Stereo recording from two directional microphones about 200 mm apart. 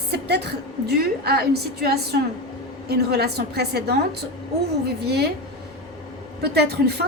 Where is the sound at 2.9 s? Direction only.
55° right (ahead or behind).